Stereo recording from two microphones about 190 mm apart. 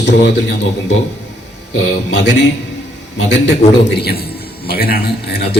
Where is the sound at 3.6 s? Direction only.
40° left (ahead or behind).